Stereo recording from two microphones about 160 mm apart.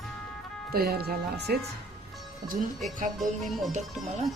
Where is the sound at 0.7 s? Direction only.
75° right (ahead or behind).